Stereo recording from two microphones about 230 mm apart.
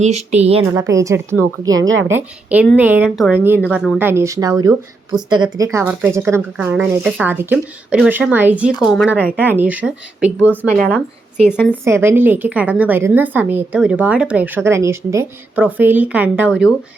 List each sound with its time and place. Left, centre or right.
0.3 s speech: right
0.7 s a woman's voice: centre
1.8 s a woman's voice: right
2.1 s a woman's voice: centre
11.7 s a woman's voice: centre